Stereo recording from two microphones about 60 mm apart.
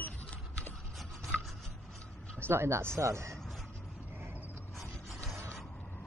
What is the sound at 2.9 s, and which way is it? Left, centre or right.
Speech, right.